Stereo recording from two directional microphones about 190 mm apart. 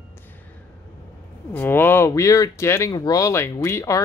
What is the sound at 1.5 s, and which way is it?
Speech, 10° left (ahead or behind).